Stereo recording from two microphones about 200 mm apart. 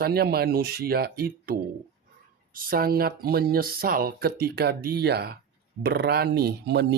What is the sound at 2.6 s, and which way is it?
Speech, 45° right (ahead or behind).